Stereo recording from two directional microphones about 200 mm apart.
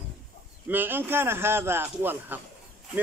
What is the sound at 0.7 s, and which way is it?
Speech, 10° right (ahead or behind).